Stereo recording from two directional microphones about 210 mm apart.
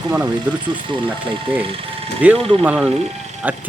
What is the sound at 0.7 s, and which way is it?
Speech, 25° right (ahead or behind).